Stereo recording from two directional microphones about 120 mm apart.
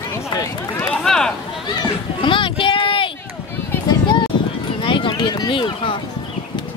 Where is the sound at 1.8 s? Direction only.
45° left (ahead or behind).